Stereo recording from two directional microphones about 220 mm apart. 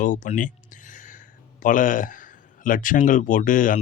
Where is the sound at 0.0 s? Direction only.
35° left (ahead or behind).